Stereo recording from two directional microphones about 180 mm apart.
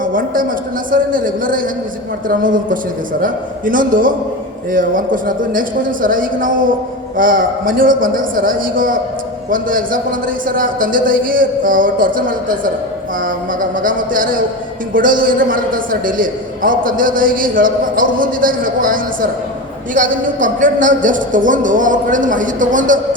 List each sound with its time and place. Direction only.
0.0 s a man's voice: 50° right (ahead or behind)